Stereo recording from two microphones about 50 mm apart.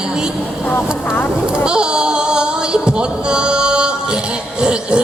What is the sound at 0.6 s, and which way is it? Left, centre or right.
Speech, left.